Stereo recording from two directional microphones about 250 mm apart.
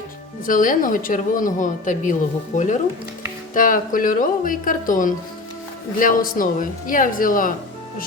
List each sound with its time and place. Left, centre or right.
0.4 s speech: left